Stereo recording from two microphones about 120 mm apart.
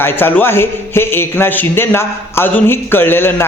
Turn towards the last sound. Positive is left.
turn(degrees=20)  # may be behind; listen again after turning